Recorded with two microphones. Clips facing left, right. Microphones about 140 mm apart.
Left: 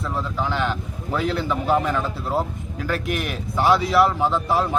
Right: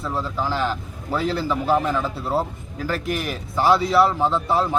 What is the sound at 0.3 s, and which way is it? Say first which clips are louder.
A man's voice: even; centre (ahead or behind).